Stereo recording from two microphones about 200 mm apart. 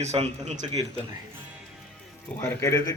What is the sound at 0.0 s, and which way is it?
Speech, 35° right (ahead or behind).